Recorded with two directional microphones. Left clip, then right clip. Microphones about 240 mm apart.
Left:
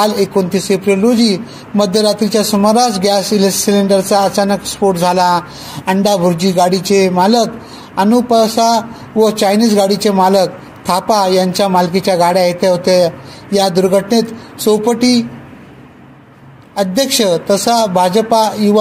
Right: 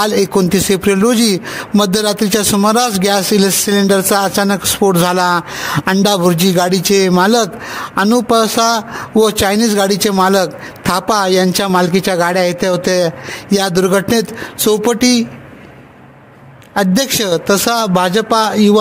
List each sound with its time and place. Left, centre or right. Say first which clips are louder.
0.0 s a man's voice: even; right
16.7 s a man's voice: left 1 dB; right